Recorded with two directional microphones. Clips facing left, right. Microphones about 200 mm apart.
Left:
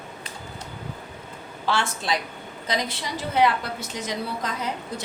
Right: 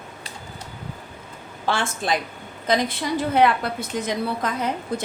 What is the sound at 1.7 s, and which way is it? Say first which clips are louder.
A woman's voice: right 2 dB; 50° right (ahead or behind).